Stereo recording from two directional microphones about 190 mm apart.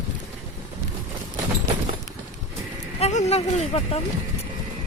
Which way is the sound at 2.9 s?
35° left (ahead or behind).